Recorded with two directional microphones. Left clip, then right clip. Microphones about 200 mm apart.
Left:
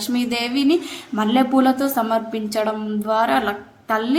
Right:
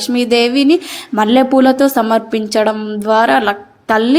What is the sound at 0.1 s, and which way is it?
Speech, 30° right (ahead or behind).